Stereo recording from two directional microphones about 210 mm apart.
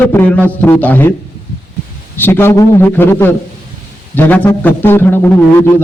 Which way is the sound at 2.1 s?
10° left (ahead or behind).